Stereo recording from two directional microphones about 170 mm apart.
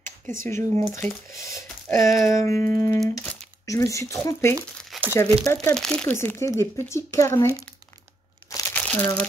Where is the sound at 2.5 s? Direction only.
55° right (ahead or behind).